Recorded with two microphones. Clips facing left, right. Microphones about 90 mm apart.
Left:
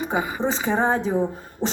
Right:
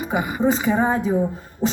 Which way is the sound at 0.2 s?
15° right (ahead or behind).